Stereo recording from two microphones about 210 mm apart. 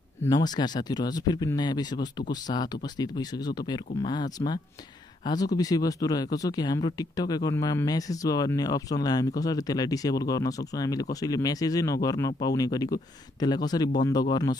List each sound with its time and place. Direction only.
0.2 s speech: 20° left (ahead or behind)